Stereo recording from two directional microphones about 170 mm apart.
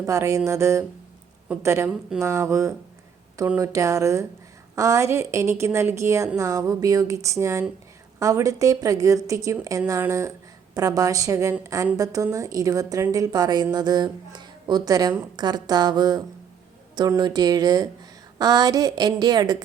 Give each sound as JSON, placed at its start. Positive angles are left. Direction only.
{"t": 0.0, "sound": "a woman's voice", "side_deg": -20}